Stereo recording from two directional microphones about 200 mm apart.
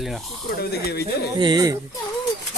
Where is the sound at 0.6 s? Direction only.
55° left (ahead or behind).